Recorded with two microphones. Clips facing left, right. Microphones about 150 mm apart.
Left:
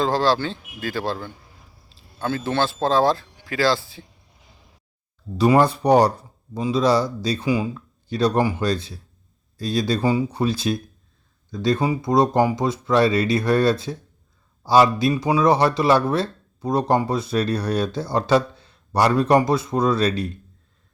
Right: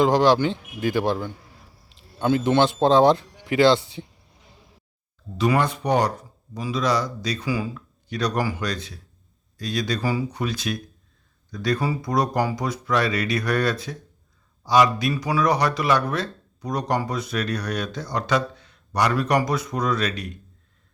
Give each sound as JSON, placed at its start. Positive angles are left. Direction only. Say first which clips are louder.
{"t": 0.0, "sound": "speech", "louder": "right 3 dB", "side_deg": -15}
{"t": 5.4, "sound": "speech", "louder": "left 5 dB", "side_deg": 35}